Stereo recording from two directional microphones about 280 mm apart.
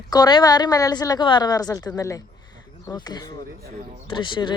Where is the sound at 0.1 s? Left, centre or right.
Centre.